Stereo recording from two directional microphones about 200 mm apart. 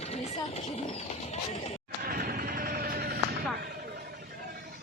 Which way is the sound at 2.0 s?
50° right (ahead or behind).